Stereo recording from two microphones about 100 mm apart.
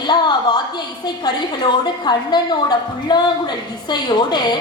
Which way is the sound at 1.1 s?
45° left (ahead or behind).